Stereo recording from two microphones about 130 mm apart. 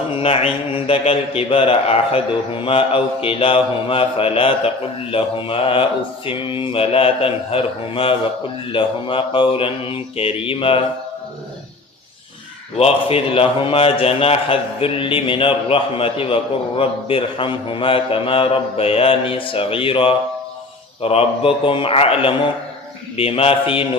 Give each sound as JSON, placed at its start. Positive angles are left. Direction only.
{"t": 0.1, "sound": "a man's voice", "side_deg": 50}
{"t": 12.7, "sound": "a man's voice", "side_deg": 50}